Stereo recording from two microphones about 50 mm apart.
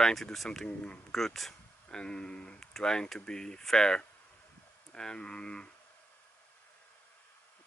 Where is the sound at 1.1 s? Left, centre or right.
Centre.